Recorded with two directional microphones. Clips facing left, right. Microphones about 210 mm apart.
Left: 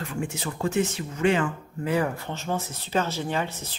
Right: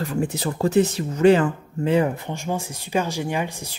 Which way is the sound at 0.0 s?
35° right (ahead or behind).